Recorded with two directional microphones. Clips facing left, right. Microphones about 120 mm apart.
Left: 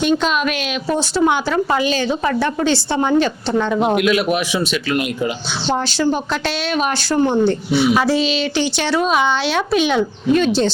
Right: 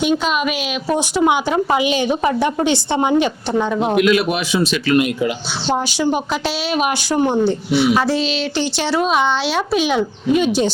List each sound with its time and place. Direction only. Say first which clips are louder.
0.0 s a woman's voice: left 1 dB; 5° right (ahead or behind)
5.6 s a woman's voice: even; 10° right (ahead or behind)
7.4 s speech: even; centre (ahead or behind)